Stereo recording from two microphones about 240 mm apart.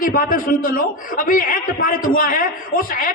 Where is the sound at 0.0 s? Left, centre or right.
Left.